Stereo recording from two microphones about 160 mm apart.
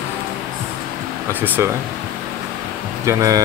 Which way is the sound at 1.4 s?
10° right (ahead or behind).